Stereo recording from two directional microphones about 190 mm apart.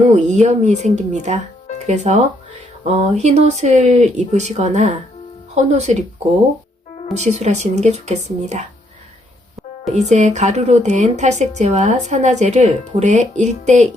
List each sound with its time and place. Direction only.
0.1 s a woman's voice: 40° right (ahead or behind)
7.3 s a woman's voice: 35° right (ahead or behind)
9.9 s a woman's voice: 35° right (ahead or behind)